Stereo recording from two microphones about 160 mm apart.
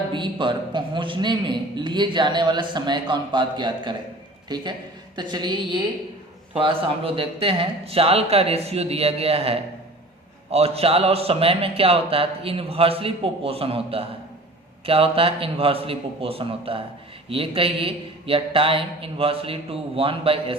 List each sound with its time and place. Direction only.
0.1 s a man's voice: 30° right (ahead or behind)